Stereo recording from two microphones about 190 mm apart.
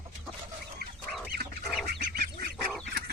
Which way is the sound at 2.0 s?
50° right (ahead or behind).